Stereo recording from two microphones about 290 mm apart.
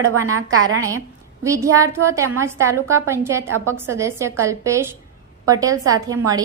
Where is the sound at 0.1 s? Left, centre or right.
Right.